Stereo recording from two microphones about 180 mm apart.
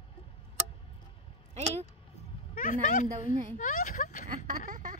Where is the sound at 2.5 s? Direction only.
45° left (ahead or behind).